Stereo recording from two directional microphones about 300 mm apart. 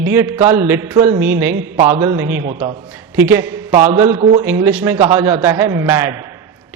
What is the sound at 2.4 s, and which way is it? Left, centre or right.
Speech, centre.